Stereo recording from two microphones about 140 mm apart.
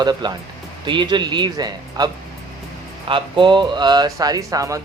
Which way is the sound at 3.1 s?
35° right (ahead or behind).